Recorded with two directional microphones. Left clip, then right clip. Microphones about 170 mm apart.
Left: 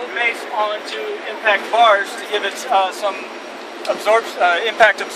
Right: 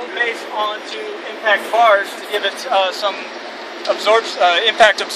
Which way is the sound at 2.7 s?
10° right (ahead or behind).